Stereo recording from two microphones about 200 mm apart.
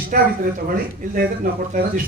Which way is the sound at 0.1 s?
45° right (ahead or behind).